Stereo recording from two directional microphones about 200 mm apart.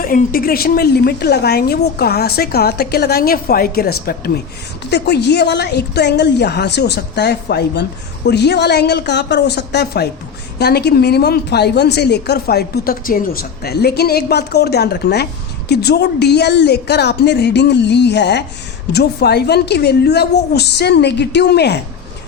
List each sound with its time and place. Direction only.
0.0 s a woman's voice: 45° left (ahead or behind)